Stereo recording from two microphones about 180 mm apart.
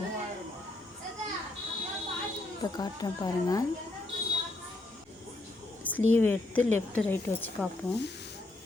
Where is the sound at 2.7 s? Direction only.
20° left (ahead or behind).